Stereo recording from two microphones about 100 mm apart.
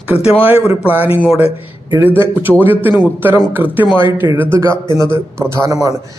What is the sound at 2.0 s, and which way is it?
A man's voice, 20° right (ahead or behind).